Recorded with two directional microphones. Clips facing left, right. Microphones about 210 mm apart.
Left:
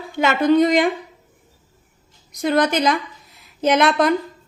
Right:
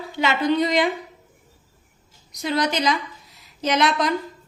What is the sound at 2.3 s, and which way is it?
A woman's voice, 50° left (ahead or behind).